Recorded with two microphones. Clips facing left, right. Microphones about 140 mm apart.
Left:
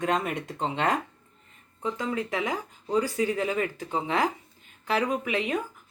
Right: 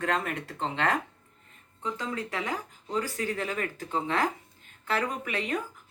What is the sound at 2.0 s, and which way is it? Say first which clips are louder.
Speech: left 5 dB; 20° left (ahead or behind).